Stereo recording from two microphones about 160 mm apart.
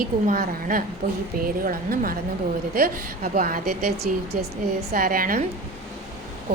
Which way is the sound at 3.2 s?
60° right (ahead or behind).